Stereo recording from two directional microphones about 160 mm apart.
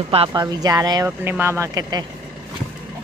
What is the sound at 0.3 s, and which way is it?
Speech, 25° right (ahead or behind).